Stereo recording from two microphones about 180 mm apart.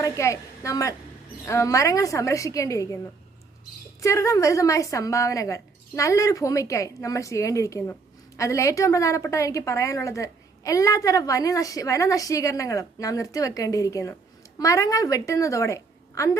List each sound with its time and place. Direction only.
0.0 s a woman's voice: 15° left (ahead or behind)
4.0 s a woman's voice: 15° left (ahead or behind)